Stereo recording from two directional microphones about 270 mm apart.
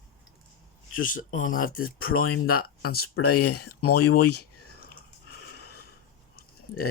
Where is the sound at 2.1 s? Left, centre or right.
Left.